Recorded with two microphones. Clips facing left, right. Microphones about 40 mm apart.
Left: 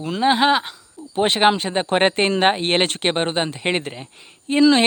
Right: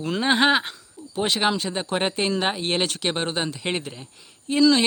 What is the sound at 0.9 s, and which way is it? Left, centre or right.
Speech, left.